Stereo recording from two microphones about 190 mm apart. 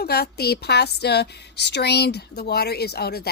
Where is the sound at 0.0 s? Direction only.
55° left (ahead or behind).